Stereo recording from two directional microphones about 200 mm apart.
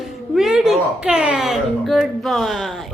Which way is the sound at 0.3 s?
Centre (ahead or behind).